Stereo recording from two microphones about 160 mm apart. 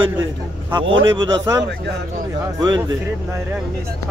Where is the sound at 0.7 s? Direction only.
30° right (ahead or behind).